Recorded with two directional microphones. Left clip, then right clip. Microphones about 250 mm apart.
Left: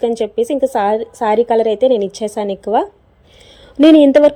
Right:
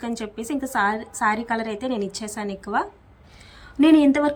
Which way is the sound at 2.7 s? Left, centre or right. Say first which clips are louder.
Left 9 dB; left.